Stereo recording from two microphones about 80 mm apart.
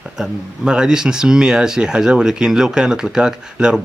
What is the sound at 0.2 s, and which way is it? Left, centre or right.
Speech, centre.